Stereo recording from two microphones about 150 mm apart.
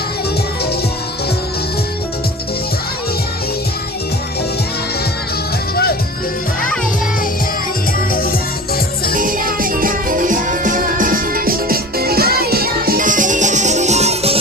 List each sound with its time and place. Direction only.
5.7 s music: 90° left
8.1 s music: 80° left
9.1 s music: 65° right (ahead or behind); by 14.3 s 45° right (ahead or behind)